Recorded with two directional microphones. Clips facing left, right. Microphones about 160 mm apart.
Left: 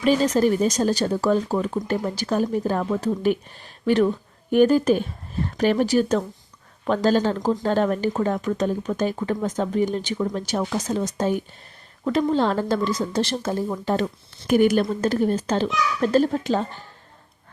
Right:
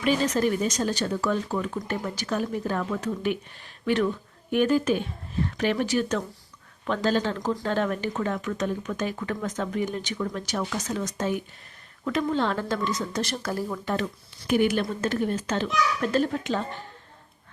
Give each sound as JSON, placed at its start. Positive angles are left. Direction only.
{"t": 0.0, "sound": "speech", "side_deg": 35}
{"t": 7.3, "sound": "speech", "side_deg": 25}
{"t": 7.6, "sound": "speech", "side_deg": 35}